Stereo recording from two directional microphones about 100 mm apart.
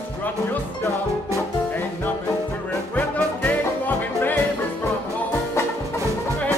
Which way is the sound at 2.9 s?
15° left (ahead or behind).